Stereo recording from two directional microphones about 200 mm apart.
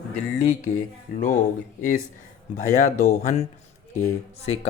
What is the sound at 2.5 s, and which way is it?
Speech, 35° left (ahead or behind).